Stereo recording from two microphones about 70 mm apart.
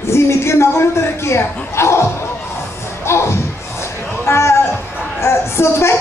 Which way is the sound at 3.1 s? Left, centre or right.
Left.